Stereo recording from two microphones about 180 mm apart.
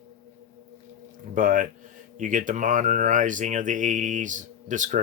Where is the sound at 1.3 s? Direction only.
50° right (ahead or behind).